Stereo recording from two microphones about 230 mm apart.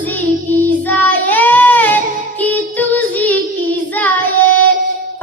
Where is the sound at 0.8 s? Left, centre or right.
Centre.